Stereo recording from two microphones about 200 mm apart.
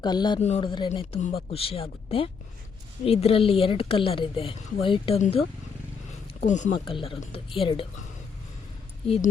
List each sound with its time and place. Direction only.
0.0 s speech: 20° left (ahead or behind)
0.3 s speech: 30° left (ahead or behind)
6.4 s speech: 35° left (ahead or behind)
6.8 s speech: 25° left (ahead or behind)
9.0 s speech: 30° left (ahead or behind)